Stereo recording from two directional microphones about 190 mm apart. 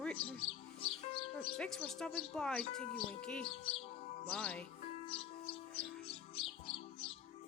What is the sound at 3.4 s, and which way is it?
Music, 30° left (ahead or behind).